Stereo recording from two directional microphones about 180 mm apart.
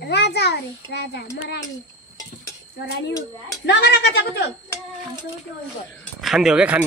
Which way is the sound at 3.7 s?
70° left (ahead or behind).